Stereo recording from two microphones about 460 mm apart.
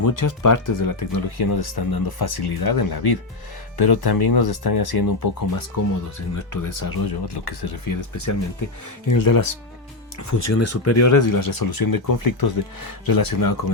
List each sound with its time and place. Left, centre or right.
0.0 s speech: left
10.2 s speech: left